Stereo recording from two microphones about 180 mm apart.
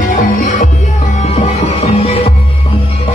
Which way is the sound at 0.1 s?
50° left (ahead or behind).